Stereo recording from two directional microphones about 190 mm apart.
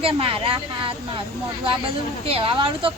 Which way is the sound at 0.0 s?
30° right (ahead or behind).